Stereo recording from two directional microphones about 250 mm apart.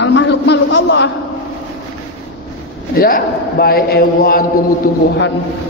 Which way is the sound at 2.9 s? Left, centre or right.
Left.